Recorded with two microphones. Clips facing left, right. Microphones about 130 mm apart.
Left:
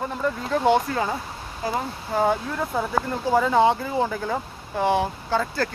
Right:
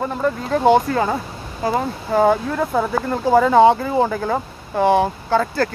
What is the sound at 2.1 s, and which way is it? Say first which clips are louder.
Speech: right 6 dB; 65° right (ahead or behind).